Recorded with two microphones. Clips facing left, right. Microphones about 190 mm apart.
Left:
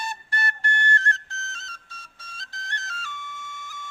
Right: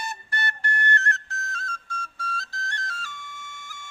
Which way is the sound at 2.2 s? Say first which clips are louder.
Right 6 dB; 20° left (ahead or behind).